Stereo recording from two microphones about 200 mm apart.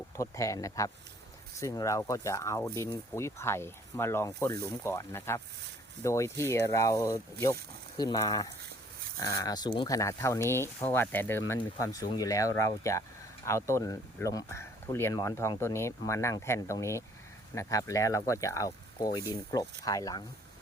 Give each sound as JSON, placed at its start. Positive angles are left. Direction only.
{"t": 0.2, "sound": "speech", "side_deg": 15}